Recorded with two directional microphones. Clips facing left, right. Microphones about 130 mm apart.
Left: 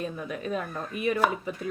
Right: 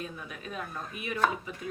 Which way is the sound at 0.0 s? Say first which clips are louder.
Left 8 dB; 40° left (ahead or behind).